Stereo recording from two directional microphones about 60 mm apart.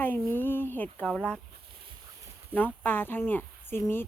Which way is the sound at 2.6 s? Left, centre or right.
Left.